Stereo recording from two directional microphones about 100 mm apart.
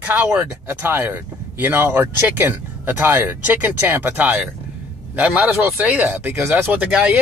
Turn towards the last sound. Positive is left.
turn(degrees=-15)  # may be behind; listen again after turning